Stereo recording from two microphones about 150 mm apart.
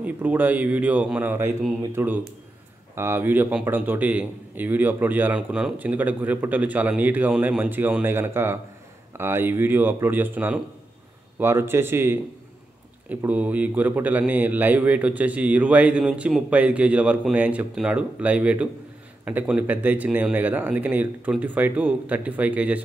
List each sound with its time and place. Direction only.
0.0 s a man's voice: 10° right (ahead or behind)